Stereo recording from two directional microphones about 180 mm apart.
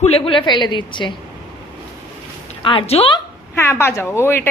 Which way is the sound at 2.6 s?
30° left (ahead or behind).